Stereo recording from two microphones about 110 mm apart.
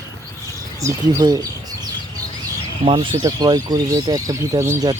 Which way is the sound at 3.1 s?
35° right (ahead or behind).